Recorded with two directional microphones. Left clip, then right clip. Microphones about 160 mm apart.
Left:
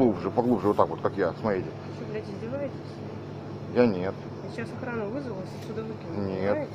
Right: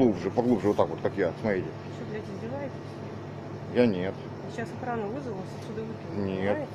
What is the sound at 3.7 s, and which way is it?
Speech, 15° right (ahead or behind).